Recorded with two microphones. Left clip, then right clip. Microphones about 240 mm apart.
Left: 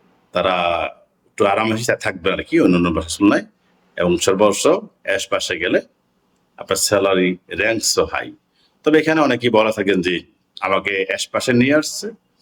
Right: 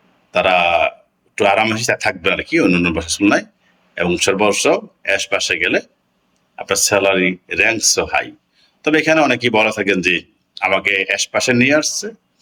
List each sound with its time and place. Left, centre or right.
0.3 s a man's voice: centre